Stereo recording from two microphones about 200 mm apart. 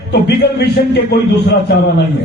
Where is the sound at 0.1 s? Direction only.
55° left (ahead or behind).